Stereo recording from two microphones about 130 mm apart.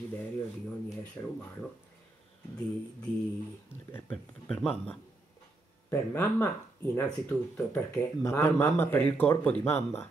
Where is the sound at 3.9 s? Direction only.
10° left (ahead or behind).